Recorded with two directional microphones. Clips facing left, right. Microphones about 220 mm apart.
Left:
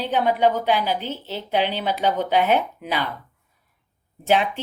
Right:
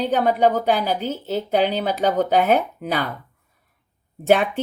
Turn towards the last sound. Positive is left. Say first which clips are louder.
# right 3 dB
turn(degrees=-50)  # may be behind; listen again after turning